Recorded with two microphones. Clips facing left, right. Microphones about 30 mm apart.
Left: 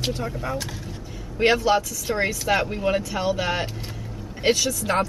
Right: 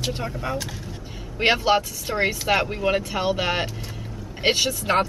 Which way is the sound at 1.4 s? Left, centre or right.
Right.